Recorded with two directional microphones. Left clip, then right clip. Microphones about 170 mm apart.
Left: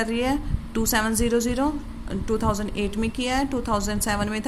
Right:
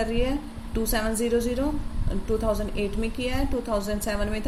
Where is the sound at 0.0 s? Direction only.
50° left (ahead or behind).